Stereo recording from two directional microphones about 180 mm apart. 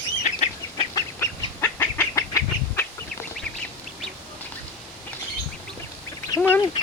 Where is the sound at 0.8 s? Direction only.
15° left (ahead or behind).